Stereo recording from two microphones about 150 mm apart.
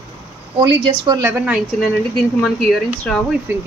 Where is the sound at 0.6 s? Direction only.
30° right (ahead or behind).